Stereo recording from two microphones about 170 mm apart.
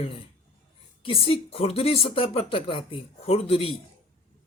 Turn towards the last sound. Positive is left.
turn(degrees=35)  # may be behind; listen again after turning